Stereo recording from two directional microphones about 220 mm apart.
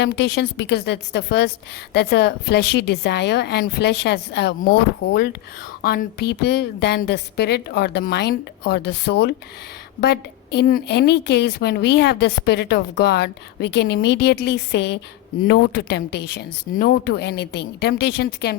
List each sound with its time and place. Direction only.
0.0 s a woman's voice: 50° left (ahead or behind)